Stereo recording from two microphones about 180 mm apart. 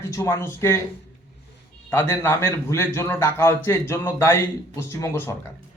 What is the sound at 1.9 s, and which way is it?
A man's voice, 10° left (ahead or behind).